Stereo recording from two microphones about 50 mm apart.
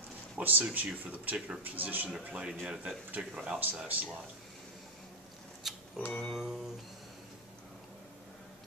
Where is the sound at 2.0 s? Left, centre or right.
Centre.